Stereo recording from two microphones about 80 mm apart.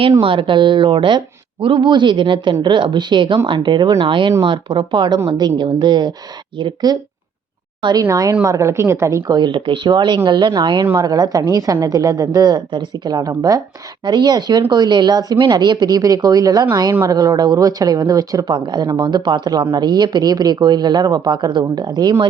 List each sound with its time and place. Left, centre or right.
0.3 s a man's voice: right
2.6 s speech: right
4.0 s a man's voice: right
8.1 s a woman's voice: right
9.3 s speech: right
10.9 s a woman's voice: right
14.0 s speech: right
16.0 s a woman's voice: right
18.9 s speech: right